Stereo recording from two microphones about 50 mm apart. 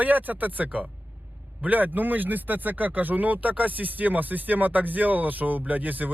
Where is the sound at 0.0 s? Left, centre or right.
Right.